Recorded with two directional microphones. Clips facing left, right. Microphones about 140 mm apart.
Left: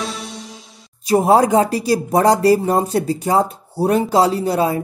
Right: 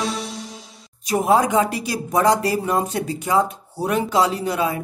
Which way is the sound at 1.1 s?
35° left (ahead or behind).